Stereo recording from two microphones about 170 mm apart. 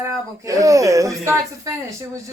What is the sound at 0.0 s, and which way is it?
A woman's voice, 20° right (ahead or behind).